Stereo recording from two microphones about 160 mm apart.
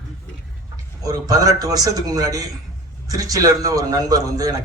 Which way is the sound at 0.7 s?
25° right (ahead or behind).